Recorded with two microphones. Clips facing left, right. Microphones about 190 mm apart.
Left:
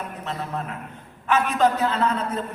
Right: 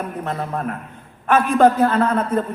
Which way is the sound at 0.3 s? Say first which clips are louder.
Right 4 dB; 55° right (ahead or behind).